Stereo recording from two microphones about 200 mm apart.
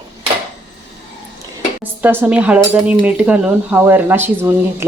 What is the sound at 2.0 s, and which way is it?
Speech, 10° right (ahead or behind).